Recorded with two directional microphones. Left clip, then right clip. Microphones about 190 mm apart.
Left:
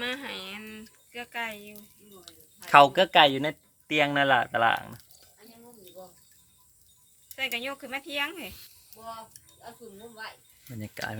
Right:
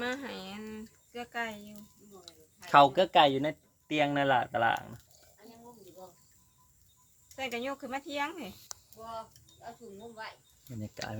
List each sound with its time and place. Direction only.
0.0 s a sound: 35° right (ahead or behind)
2.2 s speech: 15° left (ahead or behind)
7.3 s speech: 35° right (ahead or behind)
9.0 s speech: 35° left (ahead or behind)
10.8 s speech: 15° left (ahead or behind)